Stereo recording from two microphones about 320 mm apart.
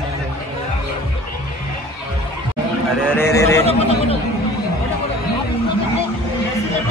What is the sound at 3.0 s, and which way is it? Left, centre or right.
Speech, centre.